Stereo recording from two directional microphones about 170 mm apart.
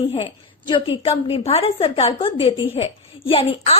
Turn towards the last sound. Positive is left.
turn(degrees=35)  # may be behind; listen again after turning